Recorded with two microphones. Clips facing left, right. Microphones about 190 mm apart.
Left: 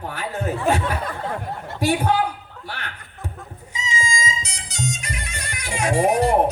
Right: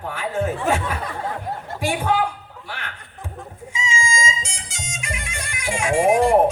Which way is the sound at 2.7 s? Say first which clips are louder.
Even; 35° left (ahead or behind).